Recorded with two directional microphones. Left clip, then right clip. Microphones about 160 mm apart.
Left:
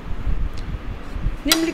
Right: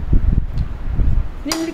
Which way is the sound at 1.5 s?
15° left (ahead or behind).